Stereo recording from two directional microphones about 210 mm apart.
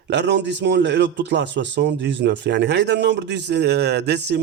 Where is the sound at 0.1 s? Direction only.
55° right (ahead or behind).